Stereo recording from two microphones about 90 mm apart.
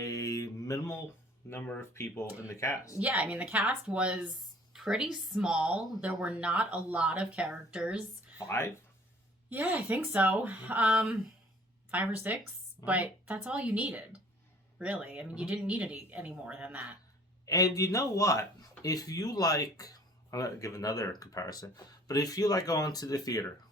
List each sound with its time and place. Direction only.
0.0 s mantra: 40° left (ahead or behind)
1.4 s speech: 30° left (ahead or behind)
3.0 s speech: 15° right (ahead or behind)
8.4 s speech: 30° left (ahead or behind)
9.5 s speech: 20° right (ahead or behind)
17.4 s speech: 40° left (ahead or behind)